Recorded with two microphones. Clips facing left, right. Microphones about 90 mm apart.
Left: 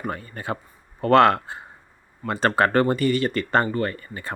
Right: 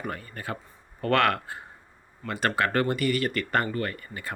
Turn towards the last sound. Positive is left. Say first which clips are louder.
# left 5 dB
turn(degrees=30)  # may be behind; listen again after turning